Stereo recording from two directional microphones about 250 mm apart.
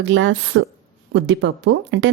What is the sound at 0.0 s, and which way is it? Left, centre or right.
Speech, right.